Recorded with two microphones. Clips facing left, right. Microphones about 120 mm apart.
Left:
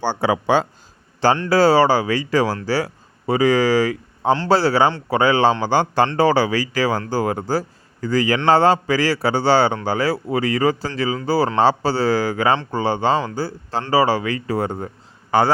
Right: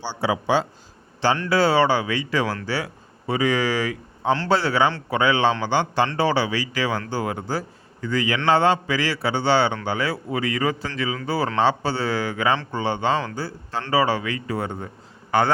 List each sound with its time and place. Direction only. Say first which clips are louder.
0.0 s a man's voice: left 5 dB; 55° left (ahead or behind)
1.5 s a man's voice: left 4 dB; 40° left (ahead or behind)